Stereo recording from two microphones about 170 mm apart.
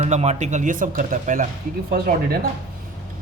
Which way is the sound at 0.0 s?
40° right (ahead or behind).